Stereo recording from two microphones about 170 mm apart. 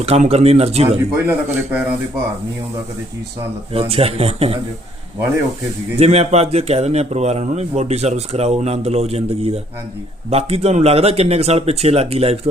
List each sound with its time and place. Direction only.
0.0 s a man's voice: 35° right (ahead or behind)
0.9 s speech: 15° right (ahead or behind)
3.7 s a man's voice: 35° right (ahead or behind)
6.0 s a man's voice: 40° right (ahead or behind)